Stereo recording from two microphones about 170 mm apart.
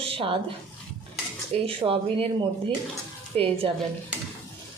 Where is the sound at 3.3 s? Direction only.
35° right (ahead or behind).